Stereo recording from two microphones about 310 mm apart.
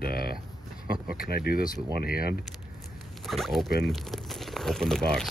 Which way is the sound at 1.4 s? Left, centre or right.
Left.